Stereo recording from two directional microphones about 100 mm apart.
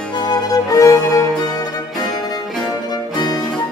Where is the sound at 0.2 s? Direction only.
35° left (ahead or behind).